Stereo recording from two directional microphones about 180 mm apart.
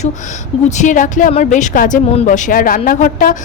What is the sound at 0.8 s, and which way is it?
A woman's voice, 45° left (ahead or behind).